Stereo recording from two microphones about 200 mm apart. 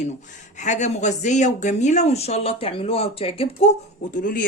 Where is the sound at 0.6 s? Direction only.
35° left (ahead or behind).